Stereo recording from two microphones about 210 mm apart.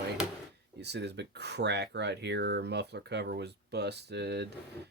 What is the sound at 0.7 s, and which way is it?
Speech, 55° right (ahead or behind).